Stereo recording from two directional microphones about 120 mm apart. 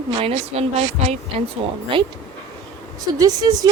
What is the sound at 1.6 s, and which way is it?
Speech, 50° right (ahead or behind).